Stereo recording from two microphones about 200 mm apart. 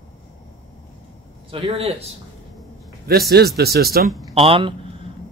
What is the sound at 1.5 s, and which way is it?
Speech, 30° right (ahead or behind).